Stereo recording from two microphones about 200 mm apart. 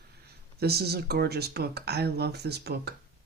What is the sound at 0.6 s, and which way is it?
Speech, 50° right (ahead or behind).